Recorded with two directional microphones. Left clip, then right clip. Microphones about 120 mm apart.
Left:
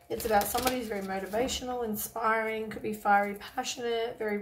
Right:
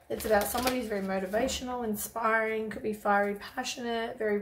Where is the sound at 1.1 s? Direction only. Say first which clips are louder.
Right 1 dB; 15° right (ahead or behind).